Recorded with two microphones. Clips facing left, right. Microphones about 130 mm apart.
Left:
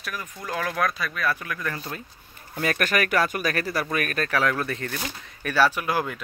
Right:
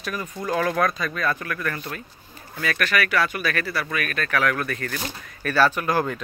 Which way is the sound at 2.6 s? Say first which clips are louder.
Even; 45° left (ahead or behind).